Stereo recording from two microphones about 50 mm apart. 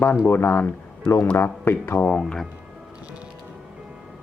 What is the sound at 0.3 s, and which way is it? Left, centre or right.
Speech, left.